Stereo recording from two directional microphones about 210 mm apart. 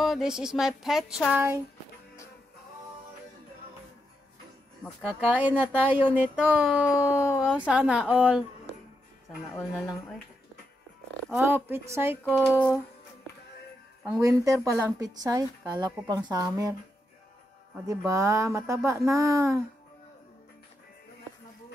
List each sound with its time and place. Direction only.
0.0 s a woman's voice: centre (ahead or behind)
4.8 s speech: 5° right (ahead or behind)
6.9 s a sound: 15° left (ahead or behind)
7.3 s a woman's voice: 5° right (ahead or behind)
11.2 s speech: 10° right (ahead or behind)
12.3 s a woman's voice: 5° left (ahead or behind)
14.0 s speech: 10° right (ahead or behind)
17.7 s speech: 15° right (ahead or behind)